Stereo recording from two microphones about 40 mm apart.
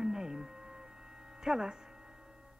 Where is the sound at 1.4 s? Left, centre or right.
Centre.